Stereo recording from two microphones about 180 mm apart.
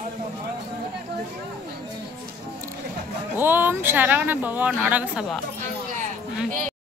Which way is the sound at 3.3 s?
10° right (ahead or behind).